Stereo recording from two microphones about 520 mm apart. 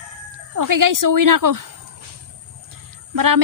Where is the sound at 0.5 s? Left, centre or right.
Right.